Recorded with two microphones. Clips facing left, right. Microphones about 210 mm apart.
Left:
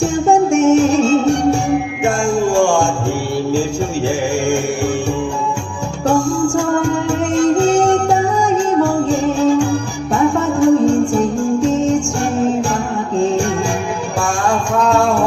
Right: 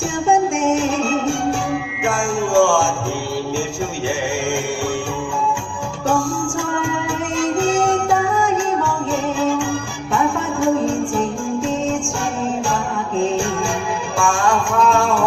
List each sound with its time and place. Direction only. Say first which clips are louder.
0.5 s music: left 7 dB; 40° left (ahead or behind)
6.1 s music: left 5 dB; 40° left (ahead or behind)
14.2 s music: even; 40° left (ahead or behind)